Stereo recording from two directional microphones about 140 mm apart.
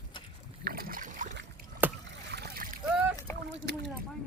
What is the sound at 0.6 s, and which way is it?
Boat, 90° right.